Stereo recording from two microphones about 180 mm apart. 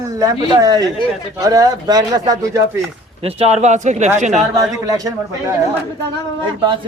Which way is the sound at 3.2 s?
35° right (ahead or behind).